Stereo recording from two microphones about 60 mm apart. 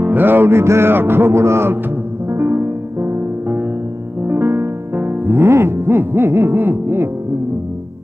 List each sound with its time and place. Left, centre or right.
0.0 s music: right